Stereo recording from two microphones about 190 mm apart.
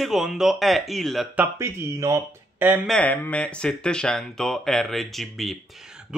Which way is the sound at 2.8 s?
5° left (ahead or behind).